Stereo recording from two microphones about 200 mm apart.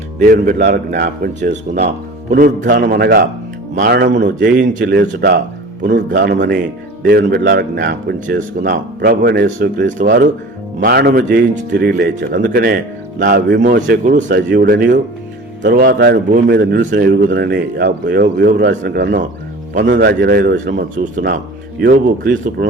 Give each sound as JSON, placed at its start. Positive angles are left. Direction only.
{"t": 0.2, "sound": "a man's voice", "side_deg": -45}
{"t": 1.4, "sound": "speech", "side_deg": -55}
{"t": 2.3, "sound": "a man's voice", "side_deg": -45}